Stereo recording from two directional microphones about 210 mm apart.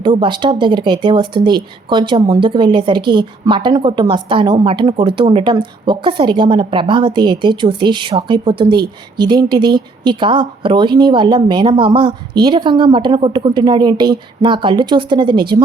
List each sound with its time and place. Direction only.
0.0 s speech: 20° right (ahead or behind)